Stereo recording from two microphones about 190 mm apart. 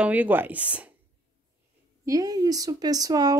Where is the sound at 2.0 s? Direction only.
20° right (ahead or behind).